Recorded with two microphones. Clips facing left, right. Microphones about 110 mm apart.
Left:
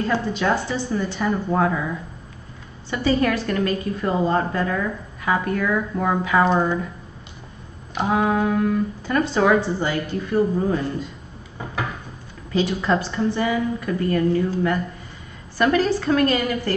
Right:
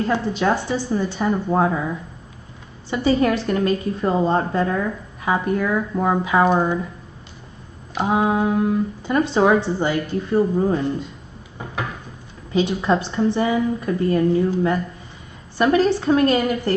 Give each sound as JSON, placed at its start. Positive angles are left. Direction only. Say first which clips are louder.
{"t": 0.0, "sound": "a woman's voice", "louder": "right 2 dB", "side_deg": -20}
{"t": 3.2, "sound": "a woman's voice", "louder": "right 2 dB", "side_deg": -20}
{"t": 7.9, "sound": "a woman's voice", "louder": "right 1 dB", "side_deg": -20}
{"t": 12.5, "sound": "a woman's voice", "louder": "right 2 dB", "side_deg": -20}